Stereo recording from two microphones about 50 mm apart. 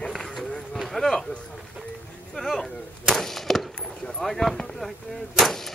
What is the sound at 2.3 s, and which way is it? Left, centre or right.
Arrow, centre.